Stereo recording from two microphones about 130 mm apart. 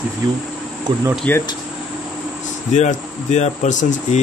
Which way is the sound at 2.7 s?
65° left (ahead or behind).